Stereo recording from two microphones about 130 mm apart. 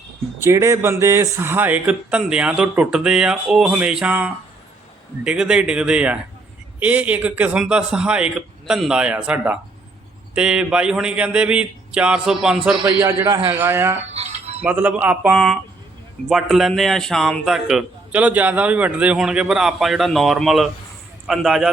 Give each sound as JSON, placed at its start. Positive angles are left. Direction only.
{"t": 0.4, "sound": "speech", "side_deg": -20}
{"t": 13.0, "sound": "a man's voice", "side_deg": -20}
{"t": 13.5, "sound": "speech", "side_deg": -15}
{"t": 14.1, "sound": "music", "side_deg": -55}
{"t": 14.6, "sound": "a man's voice", "side_deg": -15}